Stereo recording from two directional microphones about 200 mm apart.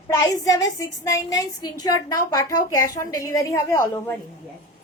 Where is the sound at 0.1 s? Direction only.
15° left (ahead or behind).